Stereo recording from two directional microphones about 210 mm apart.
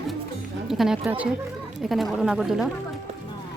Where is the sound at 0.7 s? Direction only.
Centre (ahead or behind).